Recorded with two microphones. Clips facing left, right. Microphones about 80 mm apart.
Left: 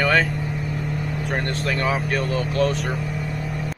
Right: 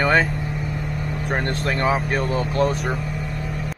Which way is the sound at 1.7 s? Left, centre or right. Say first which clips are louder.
Right 2 dB; right.